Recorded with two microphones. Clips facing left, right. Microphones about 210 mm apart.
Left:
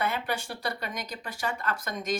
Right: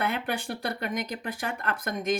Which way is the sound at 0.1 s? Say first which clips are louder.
Right 2 dB; 55° right (ahead or behind).